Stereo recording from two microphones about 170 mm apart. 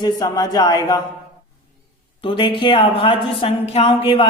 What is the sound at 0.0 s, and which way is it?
Speech, 25° left (ahead or behind).